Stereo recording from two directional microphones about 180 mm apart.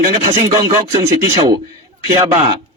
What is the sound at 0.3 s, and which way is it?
Speech, 40° right (ahead or behind).